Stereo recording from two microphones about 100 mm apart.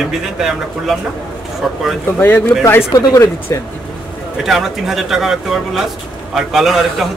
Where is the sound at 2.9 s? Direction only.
35° left (ahead or behind).